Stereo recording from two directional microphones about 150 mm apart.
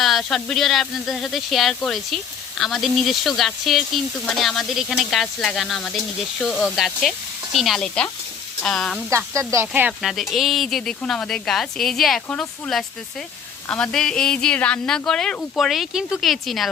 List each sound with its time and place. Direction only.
0.0 s speech: centre (ahead or behind)
9.0 s speech: 20° right (ahead or behind)
10.1 s speech: centre (ahead or behind)